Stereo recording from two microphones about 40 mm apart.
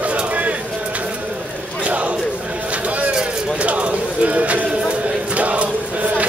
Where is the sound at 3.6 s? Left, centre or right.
Right.